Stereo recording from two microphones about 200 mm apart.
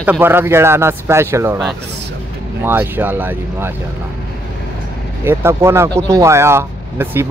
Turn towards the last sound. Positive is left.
turn(degrees=-10)  # may be behind; listen again after turning